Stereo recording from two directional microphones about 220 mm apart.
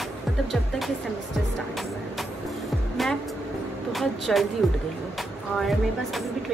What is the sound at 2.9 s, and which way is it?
Music, centre (ahead or behind).